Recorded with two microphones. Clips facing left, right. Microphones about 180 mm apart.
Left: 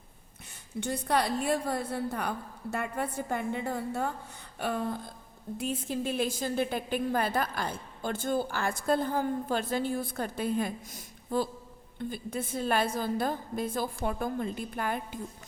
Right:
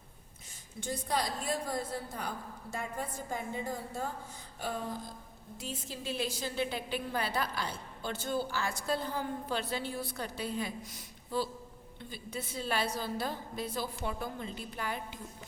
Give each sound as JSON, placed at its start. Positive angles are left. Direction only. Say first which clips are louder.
{"t": 0.8, "sound": "a woman's voice", "louder": "left 5 dB", "side_deg": 65}